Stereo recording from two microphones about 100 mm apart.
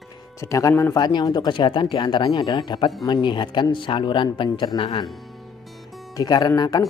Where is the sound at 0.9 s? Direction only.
40° left (ahead or behind); by 5.0 s 65° left (ahead or behind).